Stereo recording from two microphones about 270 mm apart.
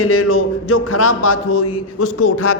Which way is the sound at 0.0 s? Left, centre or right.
Left.